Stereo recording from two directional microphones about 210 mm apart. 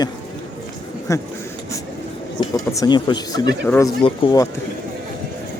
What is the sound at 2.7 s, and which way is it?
Speech, 20° left (ahead or behind).